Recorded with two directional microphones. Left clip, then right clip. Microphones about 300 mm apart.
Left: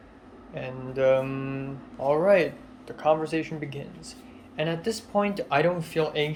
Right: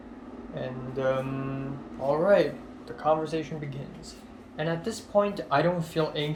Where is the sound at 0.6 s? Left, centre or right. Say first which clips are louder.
Left 5 dB; centre.